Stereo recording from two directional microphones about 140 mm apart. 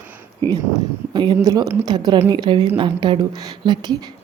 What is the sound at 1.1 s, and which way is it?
Speech, 30° right (ahead or behind).